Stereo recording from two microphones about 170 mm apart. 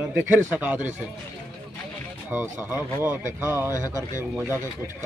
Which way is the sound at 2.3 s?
10° right (ahead or behind).